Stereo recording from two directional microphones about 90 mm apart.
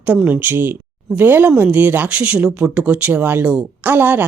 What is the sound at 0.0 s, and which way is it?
A woman's voice, 15° right (ahead or behind).